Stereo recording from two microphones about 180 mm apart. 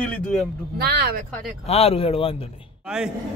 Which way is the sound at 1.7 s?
35° left (ahead or behind).